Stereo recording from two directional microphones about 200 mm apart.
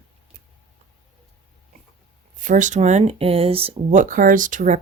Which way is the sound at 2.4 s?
40° right (ahead or behind).